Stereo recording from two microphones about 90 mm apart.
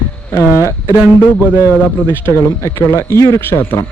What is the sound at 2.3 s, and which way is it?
A man's voice, 30° left (ahead or behind).